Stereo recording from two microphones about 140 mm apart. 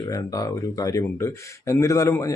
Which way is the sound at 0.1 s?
25° left (ahead or behind).